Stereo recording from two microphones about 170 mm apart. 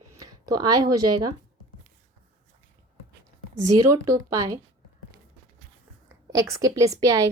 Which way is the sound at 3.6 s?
20° right (ahead or behind).